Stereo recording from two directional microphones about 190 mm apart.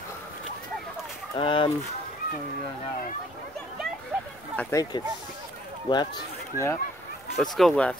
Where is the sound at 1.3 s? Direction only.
25° left (ahead or behind).